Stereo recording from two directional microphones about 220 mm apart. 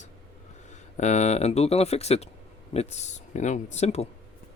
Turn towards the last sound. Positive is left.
turn(degrees=30)  # may be behind; listen again after turning